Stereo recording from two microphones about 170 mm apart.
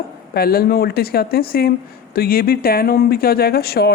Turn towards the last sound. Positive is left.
turn(degrees=65)  # may be behind; listen again after turning